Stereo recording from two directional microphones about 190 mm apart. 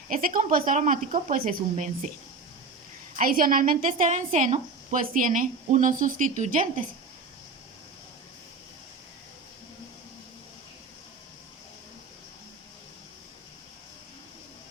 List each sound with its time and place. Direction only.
0.1 s a woman's voice: 45° right (ahead or behind)
3.2 s a woman's voice: 45° right (ahead or behind)